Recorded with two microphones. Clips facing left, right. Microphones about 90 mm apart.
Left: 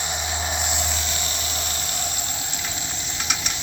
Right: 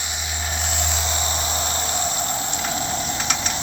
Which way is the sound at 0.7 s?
5° left (ahead or behind).